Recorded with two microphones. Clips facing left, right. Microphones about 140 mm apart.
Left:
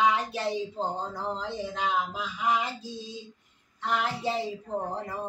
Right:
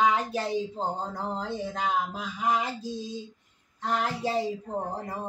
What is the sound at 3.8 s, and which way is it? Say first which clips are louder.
Speech: right 1 dB; 40° right (ahead or behind).